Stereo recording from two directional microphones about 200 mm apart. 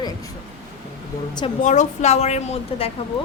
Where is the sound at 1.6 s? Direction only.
35° left (ahead or behind).